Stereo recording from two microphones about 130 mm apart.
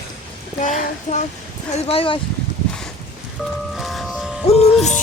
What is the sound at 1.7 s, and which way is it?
Speech, 45° left (ahead or behind).